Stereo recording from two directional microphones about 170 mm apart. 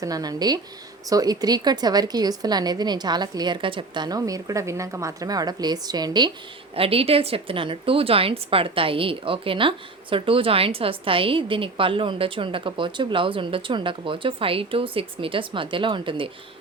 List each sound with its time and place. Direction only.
0.0 s a woman's voice: 20° right (ahead or behind)
6.7 s a woman's voice: 35° right (ahead or behind)